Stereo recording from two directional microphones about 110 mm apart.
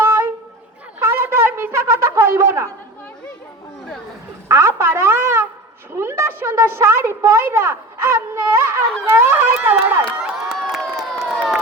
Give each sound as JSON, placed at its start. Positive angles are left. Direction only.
{"t": 0.0, "sound": "wind instrument", "side_deg": -20}
{"t": 4.4, "sound": "a sound", "side_deg": -25}
{"t": 6.0, "sound": "a woman's voice", "side_deg": -25}
{"t": 10.5, "sound": "crowd", "side_deg": 5}